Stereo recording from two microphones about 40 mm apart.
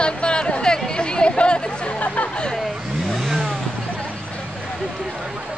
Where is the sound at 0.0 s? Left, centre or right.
Left.